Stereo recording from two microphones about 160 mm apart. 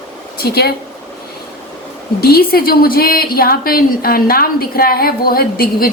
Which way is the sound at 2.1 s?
75° left (ahead or behind).